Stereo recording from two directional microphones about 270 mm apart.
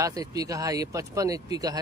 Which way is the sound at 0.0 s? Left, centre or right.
Centre.